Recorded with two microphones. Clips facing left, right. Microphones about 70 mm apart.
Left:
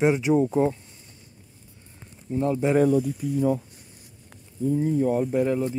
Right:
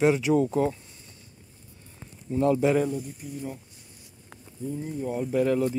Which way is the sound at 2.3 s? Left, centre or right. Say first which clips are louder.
Right 2 dB; centre.